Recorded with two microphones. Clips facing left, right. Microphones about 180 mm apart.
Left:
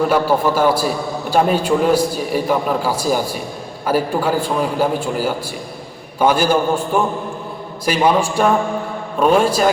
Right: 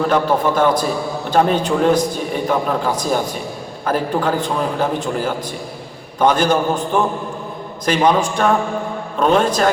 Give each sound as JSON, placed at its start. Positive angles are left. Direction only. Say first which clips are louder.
{"t": 0.1, "sound": "a man's voice", "louder": "left 1 dB", "side_deg": 5}